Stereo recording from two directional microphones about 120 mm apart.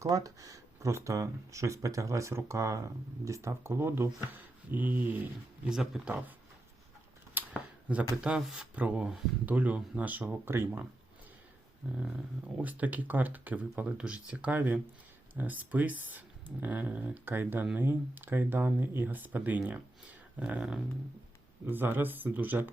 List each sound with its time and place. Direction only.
0.0 s speech: 30° right (ahead or behind)
5.6 s speech: 5° right (ahead or behind)
7.3 s scissors: 10° right (ahead or behind)
8.2 s speech: 5° right (ahead or behind)
11.9 s speech: 10° right (ahead or behind)